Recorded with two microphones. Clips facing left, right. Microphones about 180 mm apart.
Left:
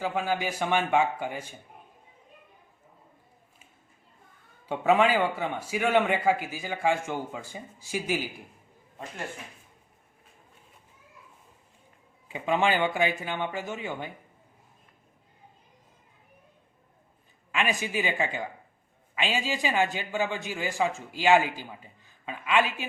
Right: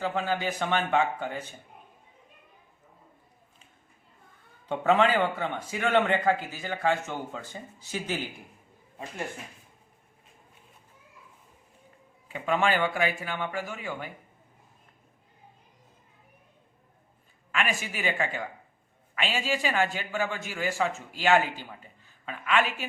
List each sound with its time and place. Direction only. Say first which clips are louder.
0.0 s a man's voice: even; 10° left (ahead or behind)
4.7 s a man's voice: left 1 dB; 10° left (ahead or behind)
12.3 s a man's voice: left 1 dB; 15° left (ahead or behind)
17.5 s a man's voice: left 2 dB; 15° left (ahead or behind)